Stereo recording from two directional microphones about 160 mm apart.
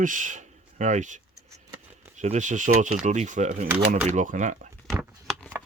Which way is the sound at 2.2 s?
50° right (ahead or behind).